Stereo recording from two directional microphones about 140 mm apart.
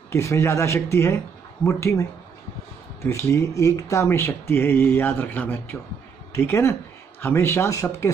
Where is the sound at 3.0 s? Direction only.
20° left (ahead or behind).